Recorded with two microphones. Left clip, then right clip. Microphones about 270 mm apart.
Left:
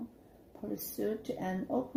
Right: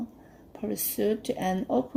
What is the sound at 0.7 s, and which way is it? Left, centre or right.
Speech, right.